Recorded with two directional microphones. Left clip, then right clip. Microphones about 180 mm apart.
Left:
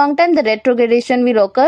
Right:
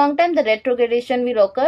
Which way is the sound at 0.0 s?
35° left (ahead or behind).